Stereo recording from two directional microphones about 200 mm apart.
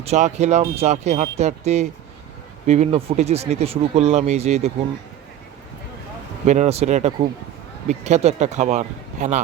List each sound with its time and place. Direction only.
0.0 s speech: 35° right (ahead or behind)
6.4 s speech: 35° right (ahead or behind)